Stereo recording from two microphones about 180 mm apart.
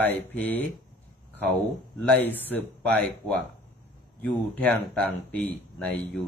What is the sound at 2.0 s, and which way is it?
Speech, 10° left (ahead or behind).